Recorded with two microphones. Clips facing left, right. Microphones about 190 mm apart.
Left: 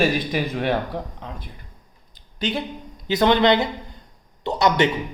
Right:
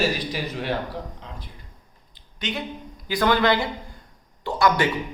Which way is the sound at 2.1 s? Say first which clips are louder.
Left 5 dB; 35° left (ahead or behind).